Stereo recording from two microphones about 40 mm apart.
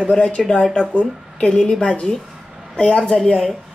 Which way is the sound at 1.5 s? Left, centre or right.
Left.